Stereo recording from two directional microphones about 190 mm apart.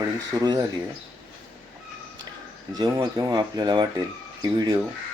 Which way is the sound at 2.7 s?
20° right (ahead or behind).